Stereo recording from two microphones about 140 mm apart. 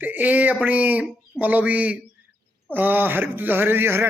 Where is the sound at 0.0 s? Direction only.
10° right (ahead or behind).